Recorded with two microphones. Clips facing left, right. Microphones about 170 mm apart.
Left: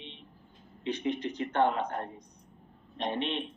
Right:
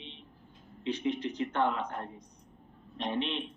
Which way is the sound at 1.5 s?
55° left (ahead or behind).